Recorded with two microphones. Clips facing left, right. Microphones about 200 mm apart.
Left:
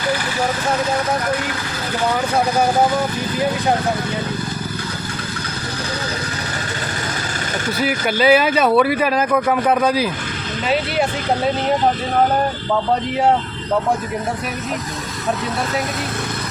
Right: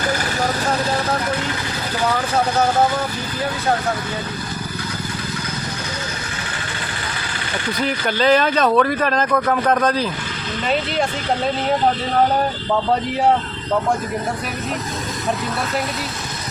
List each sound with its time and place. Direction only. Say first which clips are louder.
7.8 s speech: left 2 dB; 10° left (ahead or behind)